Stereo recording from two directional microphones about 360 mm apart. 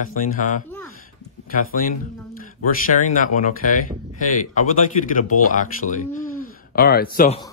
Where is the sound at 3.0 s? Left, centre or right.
Left.